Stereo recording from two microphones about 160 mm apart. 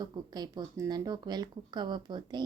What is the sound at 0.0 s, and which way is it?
Speech, 25° right (ahead or behind).